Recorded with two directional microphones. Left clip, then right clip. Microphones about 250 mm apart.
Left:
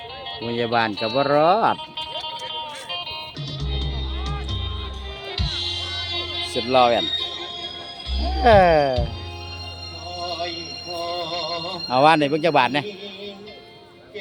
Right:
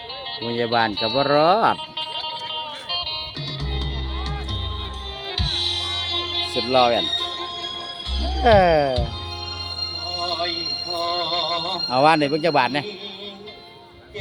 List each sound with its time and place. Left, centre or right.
0.5 s speech: centre
2.0 s music: right
5.3 s music: centre
6.7 s speech: centre
7.0 s music: centre
8.4 s speech: centre
10.1 s music: centre
11.9 s speech: centre